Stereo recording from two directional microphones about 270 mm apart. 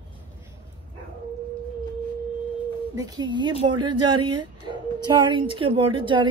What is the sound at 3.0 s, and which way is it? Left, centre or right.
A woman's voice, centre.